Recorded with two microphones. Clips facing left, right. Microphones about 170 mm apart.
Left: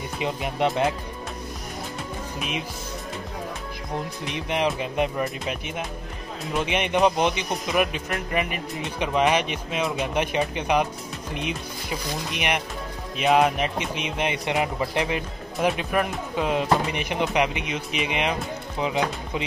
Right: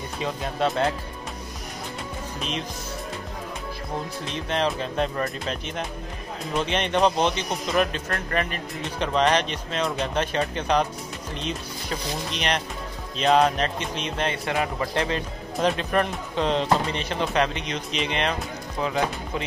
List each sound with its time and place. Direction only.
0.2 s a man's voice: 15° left (ahead or behind)
4.2 s a man's voice: 15° left (ahead or behind)